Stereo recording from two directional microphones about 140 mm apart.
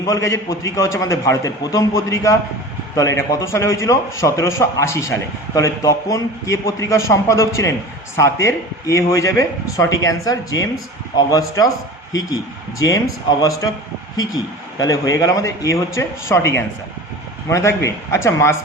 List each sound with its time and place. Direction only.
0.0 s speech: 20° left (ahead or behind)
12.8 s speech: 25° left (ahead or behind)